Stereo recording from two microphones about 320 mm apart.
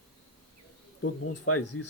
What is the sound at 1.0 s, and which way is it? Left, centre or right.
Speech, left.